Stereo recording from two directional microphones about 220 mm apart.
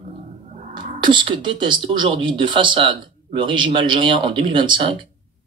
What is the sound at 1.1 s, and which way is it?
A man's voice, 20° right (ahead or behind).